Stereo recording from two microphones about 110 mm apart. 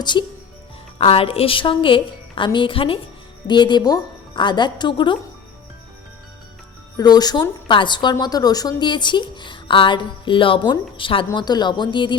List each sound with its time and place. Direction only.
0.0 s speech: 45° left (ahead or behind)
0.9 s speech: 60° left (ahead or behind)
3.4 s speech: 40° left (ahead or behind)
6.9 s speech: 40° left (ahead or behind)